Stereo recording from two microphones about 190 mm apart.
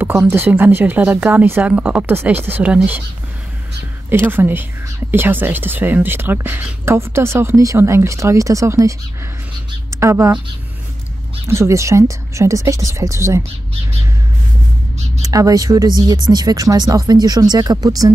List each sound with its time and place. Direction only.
0.0 s speech: 10° right (ahead or behind)
4.1 s a woman's voice: 10° right (ahead or behind)
11.4 s speech: 15° right (ahead or behind)
15.2 s speech: 20° right (ahead or behind)